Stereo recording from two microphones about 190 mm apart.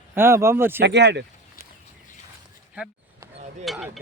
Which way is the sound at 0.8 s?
65° right (ahead or behind).